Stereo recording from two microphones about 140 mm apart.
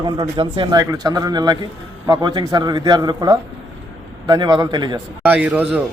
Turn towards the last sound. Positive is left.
turn(degrees=-10)  # may be behind; listen again after turning